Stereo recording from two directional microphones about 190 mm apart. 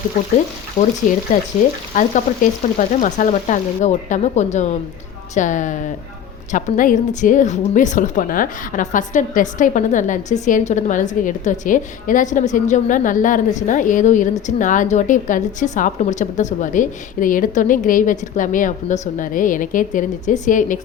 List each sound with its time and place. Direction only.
0.8 s a woman's voice: 45° left (ahead or behind)
2.0 s frying: 45° left (ahead or behind)
6.5 s a woman's voice: 40° left (ahead or behind)